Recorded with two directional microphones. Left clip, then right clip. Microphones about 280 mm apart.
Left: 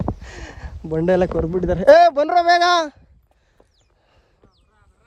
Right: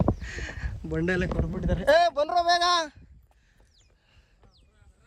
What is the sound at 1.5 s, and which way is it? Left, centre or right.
Speech, centre.